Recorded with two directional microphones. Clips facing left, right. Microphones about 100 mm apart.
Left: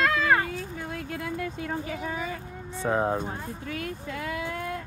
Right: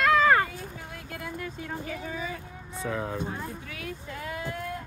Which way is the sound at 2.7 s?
35° left (ahead or behind).